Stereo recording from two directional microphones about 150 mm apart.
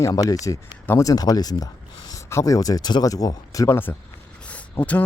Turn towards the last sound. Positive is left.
turn(degrees=10)  # may be behind; listen again after turning